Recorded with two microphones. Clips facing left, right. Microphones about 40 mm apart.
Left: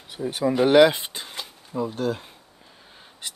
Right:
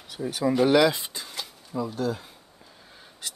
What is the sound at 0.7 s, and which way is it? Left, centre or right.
Speech, left.